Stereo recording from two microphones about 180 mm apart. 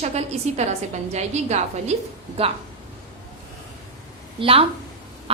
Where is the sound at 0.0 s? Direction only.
35° right (ahead or behind).